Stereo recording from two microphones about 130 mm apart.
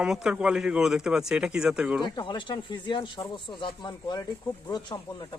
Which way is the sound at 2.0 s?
35° left (ahead or behind).